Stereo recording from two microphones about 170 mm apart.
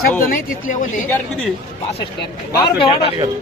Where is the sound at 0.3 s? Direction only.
50° left (ahead or behind).